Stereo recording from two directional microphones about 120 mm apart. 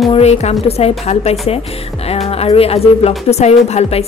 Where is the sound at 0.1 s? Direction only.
65° left (ahead or behind).